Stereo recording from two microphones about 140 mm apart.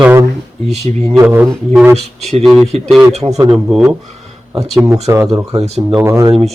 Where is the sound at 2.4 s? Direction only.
Centre (ahead or behind).